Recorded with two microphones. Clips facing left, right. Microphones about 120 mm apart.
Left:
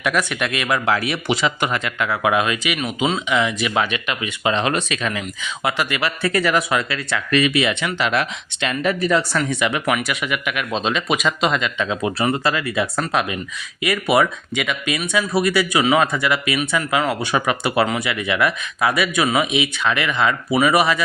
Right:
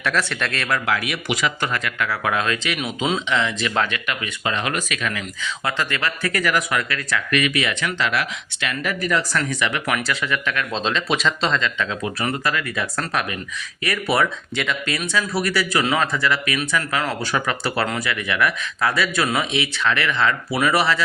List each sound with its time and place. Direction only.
0.0 s speech: 10° left (ahead or behind)
0.9 s speech: 30° left (ahead or behind); by 2.7 s 15° left (ahead or behind)
2.7 s speech: centre (ahead or behind)
3.2 s speech: 10° left (ahead or behind); by 5.2 s 25° left (ahead or behind)
5.4 s speech: 15° left (ahead or behind)
8.1 s speech: 30° left (ahead or behind); by 15.0 s 10° left (ahead or behind)
15.1 s speech: 20° left (ahead or behind)